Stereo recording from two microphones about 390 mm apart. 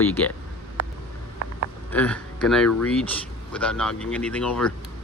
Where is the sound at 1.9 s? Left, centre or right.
Centre.